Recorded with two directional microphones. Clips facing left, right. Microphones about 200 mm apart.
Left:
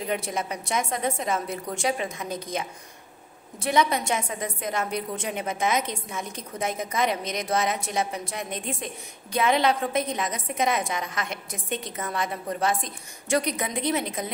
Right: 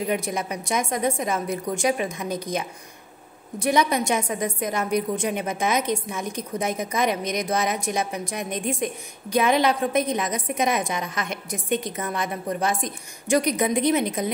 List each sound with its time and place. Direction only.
0.1 s a woman's voice: 15° right (ahead or behind)
3.6 s a woman's voice: 20° right (ahead or behind)
5.5 s a woman's voice: 20° left (ahead or behind)
5.8 s a woman's voice: 20° right (ahead or behind)